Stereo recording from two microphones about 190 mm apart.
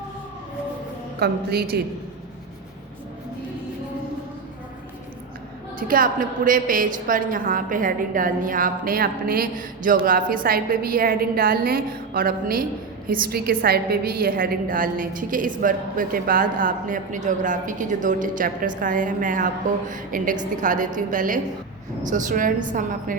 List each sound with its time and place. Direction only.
1.2 s a woman's voice: 55° right (ahead or behind)
5.9 s a woman's voice: 45° right (ahead or behind)